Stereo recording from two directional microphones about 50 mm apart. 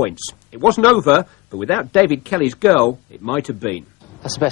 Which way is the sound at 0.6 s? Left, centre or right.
Left.